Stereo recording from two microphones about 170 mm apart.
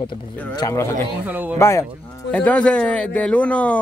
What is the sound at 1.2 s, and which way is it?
Speech, 10° right (ahead or behind).